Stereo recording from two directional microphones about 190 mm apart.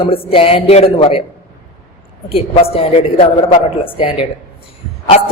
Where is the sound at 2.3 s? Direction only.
30° left (ahead or behind).